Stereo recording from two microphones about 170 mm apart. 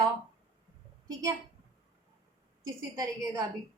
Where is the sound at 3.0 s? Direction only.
20° right (ahead or behind).